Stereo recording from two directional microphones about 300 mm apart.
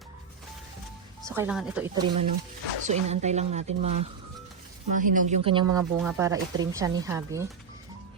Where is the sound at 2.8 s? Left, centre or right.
Right.